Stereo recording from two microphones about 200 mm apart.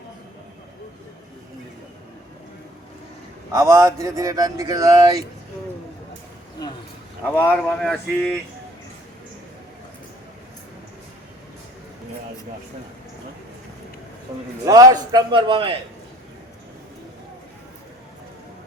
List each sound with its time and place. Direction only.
3.5 s a man's voice: 15° right (ahead or behind)
7.3 s speech: 5° left (ahead or behind)
14.6 s a man's voice: 15° right (ahead or behind)